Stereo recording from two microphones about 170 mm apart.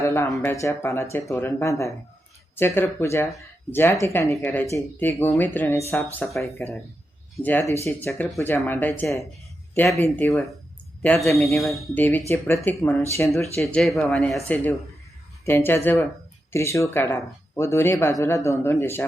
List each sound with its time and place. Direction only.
0.0 s speech: 15° left (ahead or behind)
7.4 s speech: 10° left (ahead or behind)
11.3 s speech: 15° left (ahead or behind)
11.6 s speech: centre (ahead or behind)
12.3 s speech: 15° left (ahead or behind)
13.6 s speech: 5° left (ahead or behind)